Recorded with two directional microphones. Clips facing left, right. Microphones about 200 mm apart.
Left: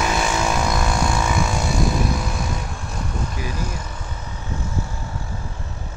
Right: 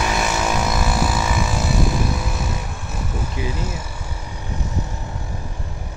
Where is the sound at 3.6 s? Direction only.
10° right (ahead or behind).